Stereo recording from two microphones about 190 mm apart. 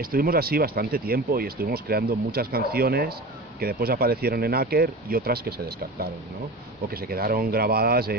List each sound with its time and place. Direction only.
0.0 s speech: 50° right (ahead or behind)